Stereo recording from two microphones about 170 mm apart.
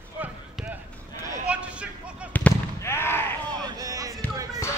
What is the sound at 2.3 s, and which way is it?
Fireworks, 10° left (ahead or behind).